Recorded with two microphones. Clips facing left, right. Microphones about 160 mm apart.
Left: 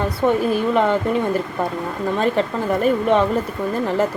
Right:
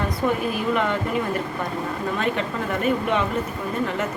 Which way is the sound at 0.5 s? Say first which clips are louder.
Left 5 dB; 35° left (ahead or behind).